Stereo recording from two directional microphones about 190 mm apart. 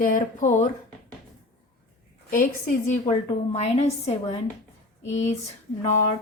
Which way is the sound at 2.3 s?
45° left (ahead or behind).